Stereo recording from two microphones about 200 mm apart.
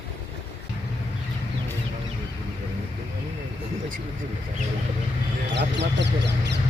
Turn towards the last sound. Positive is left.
turn(degrees=-60)  # may be behind; listen again after turning